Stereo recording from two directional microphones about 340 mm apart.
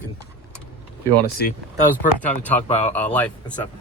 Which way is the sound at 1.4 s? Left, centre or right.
Left.